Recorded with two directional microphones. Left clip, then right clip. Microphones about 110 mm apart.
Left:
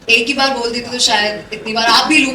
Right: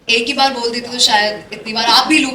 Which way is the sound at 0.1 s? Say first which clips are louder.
Left 1 dB; 60° right (ahead or behind).